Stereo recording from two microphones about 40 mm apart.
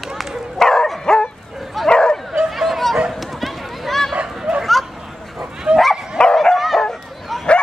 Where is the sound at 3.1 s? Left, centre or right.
Centre.